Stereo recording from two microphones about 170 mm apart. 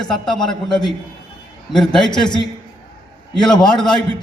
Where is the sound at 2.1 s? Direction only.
25° left (ahead or behind).